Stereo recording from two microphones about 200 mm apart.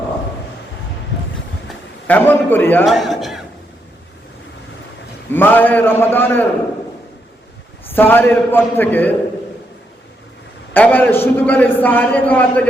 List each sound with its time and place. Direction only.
1.6 s a sound: 10° left (ahead or behind)
2.8 s a man's voice: centre (ahead or behind)
5.3 s a man's voice: 10° left (ahead or behind)
7.9 s a man's voice: 10° left (ahead or behind)
10.8 s a man's voice: 10° left (ahead or behind)